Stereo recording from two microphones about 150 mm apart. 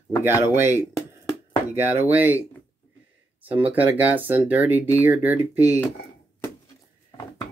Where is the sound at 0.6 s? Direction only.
15° right (ahead or behind).